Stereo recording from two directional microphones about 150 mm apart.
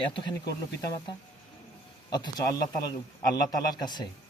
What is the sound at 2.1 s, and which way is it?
A man's voice, 25° left (ahead or behind).